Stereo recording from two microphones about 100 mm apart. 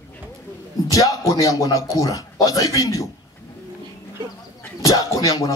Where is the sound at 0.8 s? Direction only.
35° left (ahead or behind).